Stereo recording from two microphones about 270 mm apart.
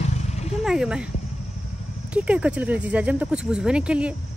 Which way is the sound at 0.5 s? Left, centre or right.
Centre.